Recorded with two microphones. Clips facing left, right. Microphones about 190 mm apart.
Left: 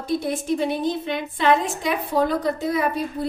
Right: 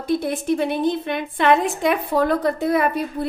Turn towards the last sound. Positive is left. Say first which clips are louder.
# right 2 dB
turn(degrees=-60)  # may be behind; listen again after turning